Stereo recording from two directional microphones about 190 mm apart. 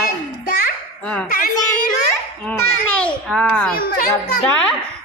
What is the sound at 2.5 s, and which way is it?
A woman's voice, 5° left (ahead or behind).